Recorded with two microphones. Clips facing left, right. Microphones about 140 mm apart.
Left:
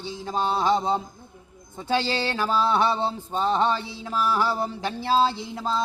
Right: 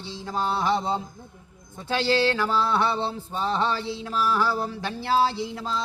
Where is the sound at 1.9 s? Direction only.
20° left (ahead or behind).